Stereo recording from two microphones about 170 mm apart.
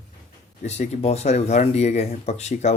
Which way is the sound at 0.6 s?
40° left (ahead or behind).